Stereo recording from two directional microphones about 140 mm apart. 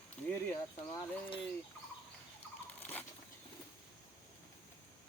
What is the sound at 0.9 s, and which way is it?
Speech, 35° left (ahead or behind).